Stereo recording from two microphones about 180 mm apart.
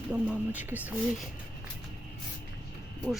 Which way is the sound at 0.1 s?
10° right (ahead or behind).